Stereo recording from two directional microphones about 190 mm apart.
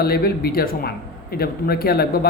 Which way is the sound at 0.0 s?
55° left (ahead or behind).